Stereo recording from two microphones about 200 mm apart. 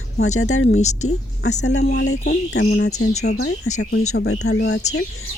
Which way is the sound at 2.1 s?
45° left (ahead or behind).